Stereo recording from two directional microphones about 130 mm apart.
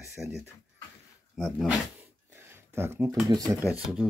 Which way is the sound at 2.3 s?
20° right (ahead or behind).